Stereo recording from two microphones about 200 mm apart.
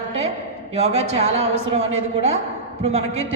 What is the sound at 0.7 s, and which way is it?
A woman's voice, 30° right (ahead or behind).